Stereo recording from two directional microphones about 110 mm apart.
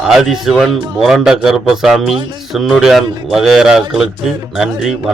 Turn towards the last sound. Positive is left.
turn(degrees=-5)  # may be behind; listen again after turning